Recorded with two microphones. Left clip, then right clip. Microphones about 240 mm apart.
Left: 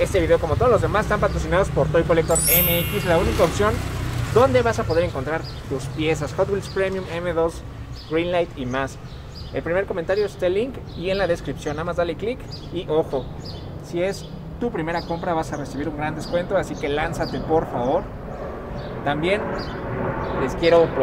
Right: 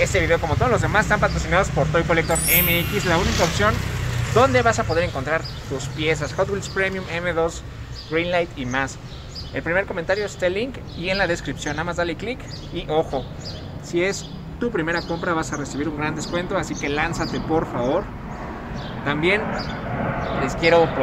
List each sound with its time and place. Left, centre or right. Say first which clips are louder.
0.0 s speech: left 1 dB; centre
19.0 s speech: right 1 dB; centre